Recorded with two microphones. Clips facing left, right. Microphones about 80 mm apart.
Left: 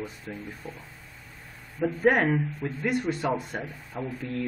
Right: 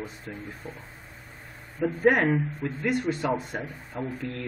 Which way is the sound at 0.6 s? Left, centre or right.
Right.